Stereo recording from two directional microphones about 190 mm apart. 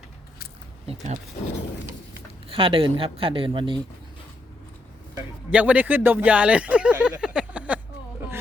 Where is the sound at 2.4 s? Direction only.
25° right (ahead or behind).